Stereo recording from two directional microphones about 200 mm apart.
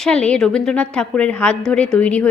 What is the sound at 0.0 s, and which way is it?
A woman's voice, 5° left (ahead or behind).